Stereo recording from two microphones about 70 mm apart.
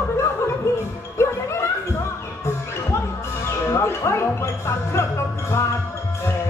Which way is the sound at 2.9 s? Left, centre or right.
Left.